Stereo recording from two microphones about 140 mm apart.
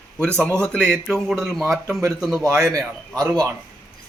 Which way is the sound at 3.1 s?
25° right (ahead or behind).